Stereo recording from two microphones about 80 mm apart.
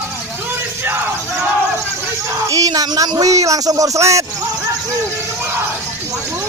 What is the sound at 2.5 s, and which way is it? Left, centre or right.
Speech, right.